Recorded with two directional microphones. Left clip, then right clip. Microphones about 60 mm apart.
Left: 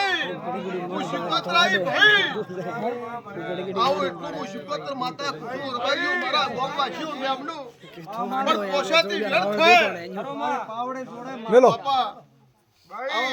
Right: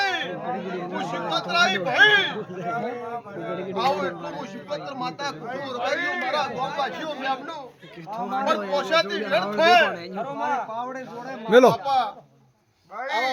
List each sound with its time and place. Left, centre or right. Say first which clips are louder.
0.0 s chatter: left 1 dB; right
0.3 s chatter: even; centre
0.9 s speech: left 1 dB; centre
3.8 s speech: left 2 dB; centre
8.1 s speech: left 1 dB; right
8.7 s speech: left 1 dB; centre
11.7 s speech: even; right